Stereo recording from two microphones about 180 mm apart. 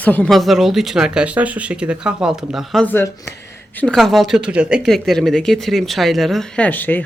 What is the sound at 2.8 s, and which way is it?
Speech, 15° left (ahead or behind).